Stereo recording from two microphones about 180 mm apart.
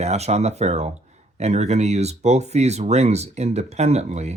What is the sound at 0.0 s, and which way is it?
Speech, 35° right (ahead or behind).